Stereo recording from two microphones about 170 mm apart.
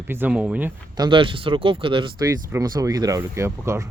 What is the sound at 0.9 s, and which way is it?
Speech, 25° right (ahead or behind).